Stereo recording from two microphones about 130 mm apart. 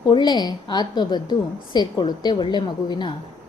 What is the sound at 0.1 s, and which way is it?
A woman's voice, 35° left (ahead or behind).